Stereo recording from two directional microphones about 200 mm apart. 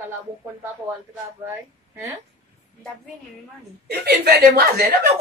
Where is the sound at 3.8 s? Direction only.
55° right (ahead or behind).